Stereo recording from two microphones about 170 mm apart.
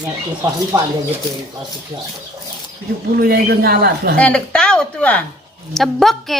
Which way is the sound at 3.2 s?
65° right (ahead or behind).